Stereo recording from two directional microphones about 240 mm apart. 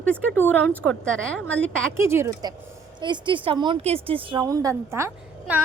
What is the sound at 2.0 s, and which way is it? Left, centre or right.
A woman's voice, centre.